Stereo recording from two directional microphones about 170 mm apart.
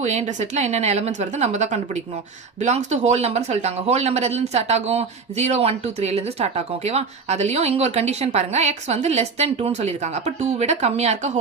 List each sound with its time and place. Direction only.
0.0 s speech: 40° right (ahead or behind)